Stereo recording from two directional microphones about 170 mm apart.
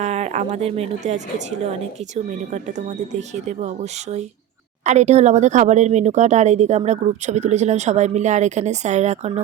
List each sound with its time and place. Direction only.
0.0 s a woman's voice: 40° right (ahead or behind)
4.9 s speech: 40° right (ahead or behind)